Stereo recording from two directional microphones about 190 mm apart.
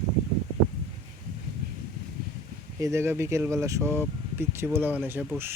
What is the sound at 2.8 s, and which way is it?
Speech, 15° right (ahead or behind).